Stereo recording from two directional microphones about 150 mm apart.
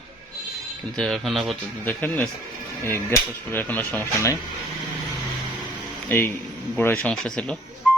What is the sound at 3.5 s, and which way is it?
Speech, 15° left (ahead or behind).